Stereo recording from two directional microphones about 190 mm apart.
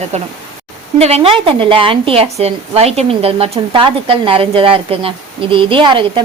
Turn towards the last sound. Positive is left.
turn(degrees=-25)  # may be behind; listen again after turning